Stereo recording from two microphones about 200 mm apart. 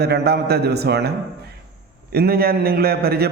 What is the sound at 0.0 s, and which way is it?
A man's voice, 55° right (ahead or behind).